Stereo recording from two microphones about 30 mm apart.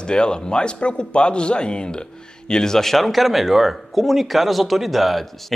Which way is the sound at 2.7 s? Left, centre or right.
Centre.